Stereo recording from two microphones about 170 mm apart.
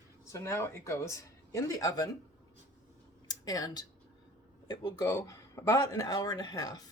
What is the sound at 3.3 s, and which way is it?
Speech, 20° left (ahead or behind).